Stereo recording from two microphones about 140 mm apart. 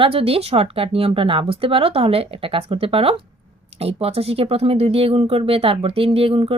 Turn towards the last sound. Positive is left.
turn(degrees=-40)  # may be behind; listen again after turning